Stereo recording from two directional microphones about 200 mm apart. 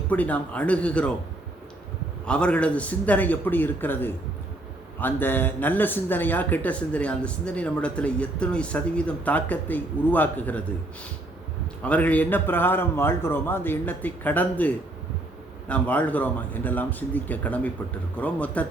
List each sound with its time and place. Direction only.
0.1 s speech: 5° left (ahead or behind)
2.2 s speech: 5° left (ahead or behind)
11.8 s speech: 5° left (ahead or behind)
15.7 s speech: 5° left (ahead or behind)